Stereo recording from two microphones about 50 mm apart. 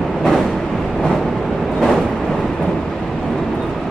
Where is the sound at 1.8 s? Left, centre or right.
Centre.